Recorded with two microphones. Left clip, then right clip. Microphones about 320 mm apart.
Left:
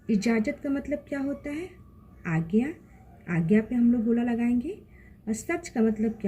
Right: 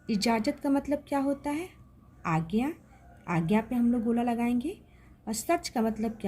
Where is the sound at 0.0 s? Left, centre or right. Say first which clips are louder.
Left 1 dB; right.